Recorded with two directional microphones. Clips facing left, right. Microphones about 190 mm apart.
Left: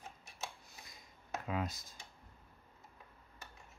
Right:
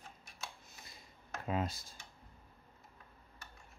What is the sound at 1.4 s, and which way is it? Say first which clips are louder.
Speech: right 3 dB; 30° right (ahead or behind).